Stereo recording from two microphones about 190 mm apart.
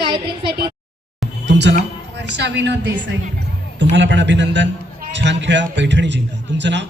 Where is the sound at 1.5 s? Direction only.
65° right (ahead or behind).